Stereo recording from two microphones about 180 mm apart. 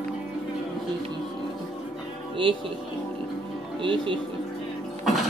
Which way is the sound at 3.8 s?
30° right (ahead or behind).